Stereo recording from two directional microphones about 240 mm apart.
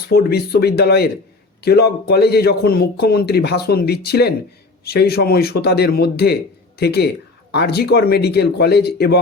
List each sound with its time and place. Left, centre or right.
0.1 s a man's voice: left